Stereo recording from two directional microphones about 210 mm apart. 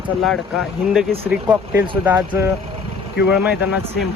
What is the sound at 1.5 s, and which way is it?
Speech, 25° right (ahead or behind).